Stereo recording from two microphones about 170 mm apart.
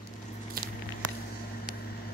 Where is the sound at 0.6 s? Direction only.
60° right (ahead or behind).